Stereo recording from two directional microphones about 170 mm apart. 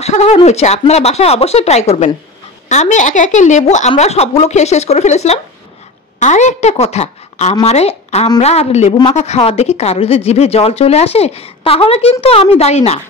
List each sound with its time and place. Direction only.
0.0 s a woman's voice: 40° left (ahead or behind)